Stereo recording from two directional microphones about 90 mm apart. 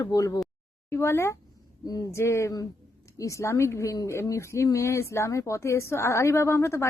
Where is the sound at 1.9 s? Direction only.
45° left (ahead or behind).